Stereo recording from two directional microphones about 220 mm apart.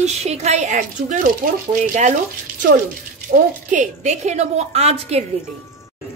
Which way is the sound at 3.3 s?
35° right (ahead or behind).